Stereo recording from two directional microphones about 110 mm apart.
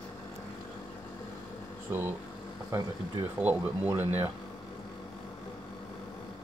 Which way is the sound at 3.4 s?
20° right (ahead or behind).